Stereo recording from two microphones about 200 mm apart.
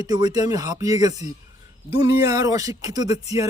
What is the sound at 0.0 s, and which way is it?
A man's voice, 20° right (ahead or behind).